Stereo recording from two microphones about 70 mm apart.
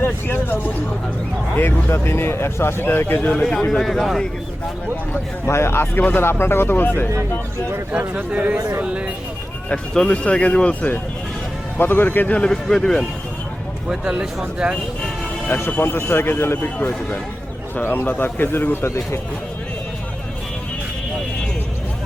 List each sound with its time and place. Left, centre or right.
0.0 s a man's voice: left
3.3 s speech: centre
5.5 s speech: left
7.9 s speech: centre
9.6 s a man's voice: centre
12.5 s speech: centre
13.8 s speech: centre
15.4 s speech: left
17.7 s a man's voice: left
18.9 s speech: left